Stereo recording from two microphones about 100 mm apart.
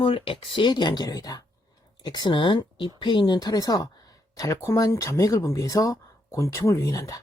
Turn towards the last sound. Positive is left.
turn(degrees=35)  # may be behind; listen again after turning